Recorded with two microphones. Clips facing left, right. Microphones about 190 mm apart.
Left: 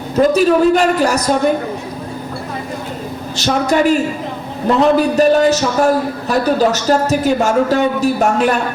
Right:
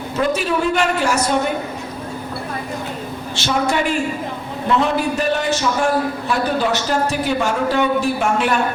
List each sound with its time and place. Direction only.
0.2 s a man's voice: 40° left (ahead or behind)
3.3 s a man's voice: 40° left (ahead or behind)